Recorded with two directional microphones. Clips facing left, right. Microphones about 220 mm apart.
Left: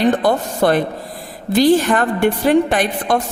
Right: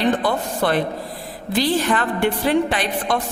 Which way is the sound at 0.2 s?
45° left (ahead or behind).